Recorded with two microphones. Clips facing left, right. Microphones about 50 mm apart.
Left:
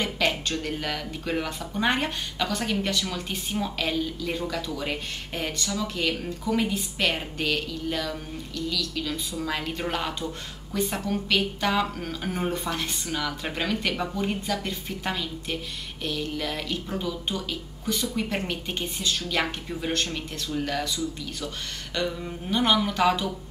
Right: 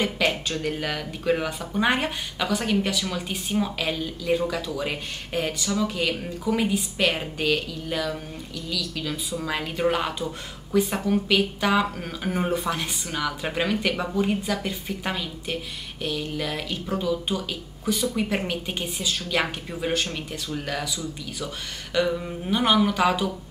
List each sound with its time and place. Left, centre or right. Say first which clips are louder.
0.0 s speech: right 2 dB; centre